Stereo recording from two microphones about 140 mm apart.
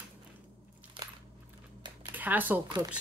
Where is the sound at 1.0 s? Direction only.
35° right (ahead or behind).